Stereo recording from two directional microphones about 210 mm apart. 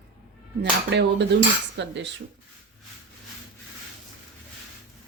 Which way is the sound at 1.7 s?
55° right (ahead or behind).